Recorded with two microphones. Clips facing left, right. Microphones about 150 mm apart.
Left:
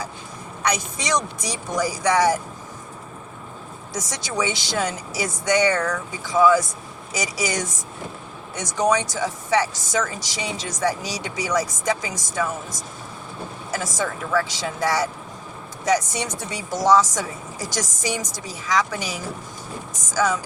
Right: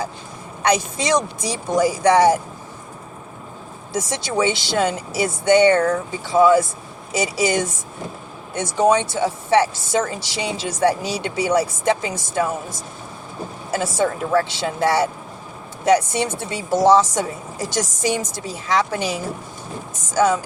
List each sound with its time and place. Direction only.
0.6 s a woman's voice: 30° right (ahead or behind)
3.9 s a woman's voice: 25° right (ahead or behind)